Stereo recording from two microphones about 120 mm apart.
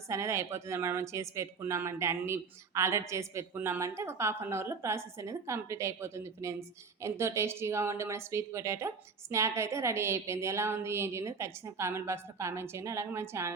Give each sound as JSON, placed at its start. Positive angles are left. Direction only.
{"t": 0.1, "sound": "a woman's voice", "side_deg": -25}